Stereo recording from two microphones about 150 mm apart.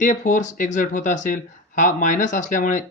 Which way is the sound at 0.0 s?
55° left (ahead or behind).